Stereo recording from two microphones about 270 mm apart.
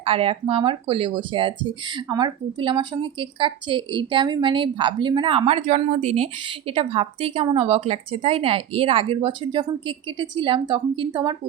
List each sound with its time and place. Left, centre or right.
0.0 s speech: right